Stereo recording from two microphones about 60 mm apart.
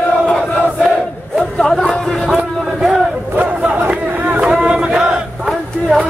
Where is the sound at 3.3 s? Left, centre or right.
Right.